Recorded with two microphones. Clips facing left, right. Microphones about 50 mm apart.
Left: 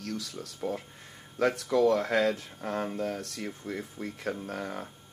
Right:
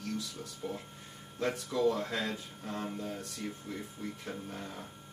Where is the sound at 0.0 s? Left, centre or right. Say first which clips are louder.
Left 2 dB; left.